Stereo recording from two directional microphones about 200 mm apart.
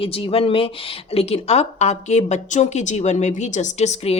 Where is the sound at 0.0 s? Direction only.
25° left (ahead or behind).